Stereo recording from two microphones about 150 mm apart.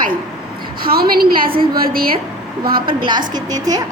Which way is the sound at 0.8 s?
85° right.